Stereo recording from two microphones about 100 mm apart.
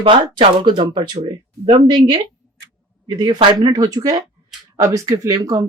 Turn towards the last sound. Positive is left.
turn(degrees=-35)  # may be behind; listen again after turning